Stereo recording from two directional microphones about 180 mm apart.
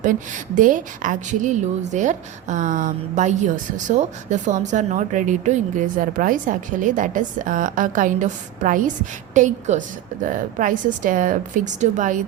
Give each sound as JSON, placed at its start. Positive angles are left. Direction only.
{"t": 0.0, "sound": "a woman's voice", "side_deg": -45}